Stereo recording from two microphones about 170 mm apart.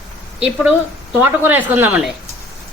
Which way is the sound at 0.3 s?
5° right (ahead or behind).